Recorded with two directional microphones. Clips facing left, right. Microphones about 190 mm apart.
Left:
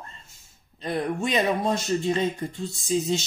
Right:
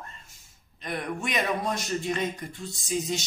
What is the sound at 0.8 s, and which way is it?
Speech, 30° left (ahead or behind).